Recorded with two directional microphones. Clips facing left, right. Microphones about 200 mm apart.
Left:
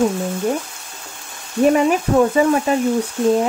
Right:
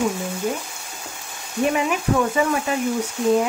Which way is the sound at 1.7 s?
40° left (ahead or behind).